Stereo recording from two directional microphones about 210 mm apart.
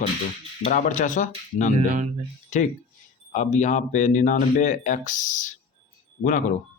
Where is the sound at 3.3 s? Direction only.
35° left (ahead or behind).